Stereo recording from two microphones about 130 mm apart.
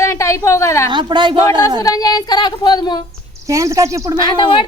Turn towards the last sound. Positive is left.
turn(degrees=35)  # may be behind; listen again after turning